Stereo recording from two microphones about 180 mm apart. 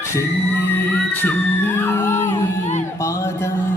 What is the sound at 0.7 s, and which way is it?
Music, 10° left (ahead or behind).